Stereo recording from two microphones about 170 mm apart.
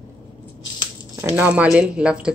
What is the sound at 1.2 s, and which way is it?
Speech, 10° right (ahead or behind).